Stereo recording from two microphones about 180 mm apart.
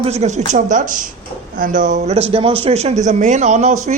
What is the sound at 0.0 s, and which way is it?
A man's voice, 40° right (ahead or behind).